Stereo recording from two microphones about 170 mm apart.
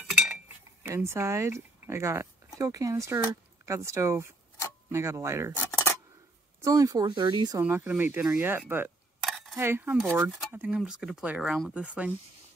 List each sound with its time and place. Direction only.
0.1 s cutlery: 5° right (ahead or behind)
0.8 s speech: 15° right (ahead or behind)
6.6 s speech: 20° right (ahead or behind)
7.6 s speech: 10° right (ahead or behind)